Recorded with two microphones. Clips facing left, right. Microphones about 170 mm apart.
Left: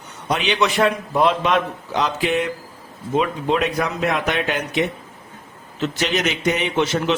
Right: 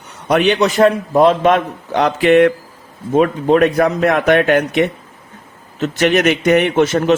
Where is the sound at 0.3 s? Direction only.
50° right (ahead or behind).